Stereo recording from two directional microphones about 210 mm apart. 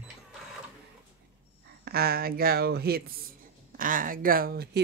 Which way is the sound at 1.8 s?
45° right (ahead or behind).